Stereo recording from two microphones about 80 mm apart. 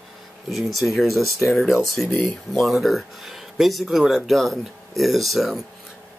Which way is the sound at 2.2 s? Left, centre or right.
Centre.